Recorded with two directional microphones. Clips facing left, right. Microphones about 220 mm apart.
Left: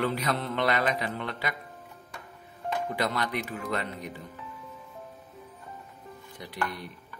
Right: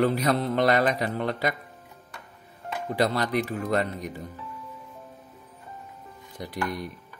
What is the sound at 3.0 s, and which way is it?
Speech, 35° right (ahead or behind).